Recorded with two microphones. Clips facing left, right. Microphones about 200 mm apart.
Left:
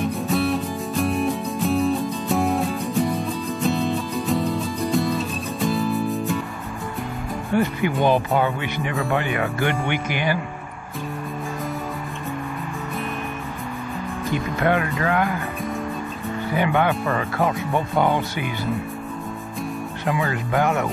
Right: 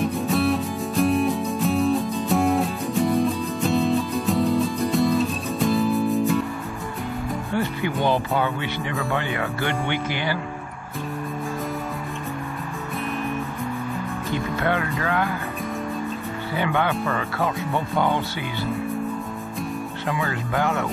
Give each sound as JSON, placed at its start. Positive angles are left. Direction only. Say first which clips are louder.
{"t": 0.0, "sound": "music", "louder": "right 1 dB", "side_deg": 0}
{"t": 7.5, "sound": "speech", "louder": "left 5 dB", "side_deg": 15}
{"t": 14.6, "sound": "music", "louder": "left 5 dB", "side_deg": 20}
{"t": 16.5, "sound": "music", "louder": "left 3 dB", "side_deg": 20}
{"t": 20.1, "sound": "music", "louder": "left 3 dB", "side_deg": 20}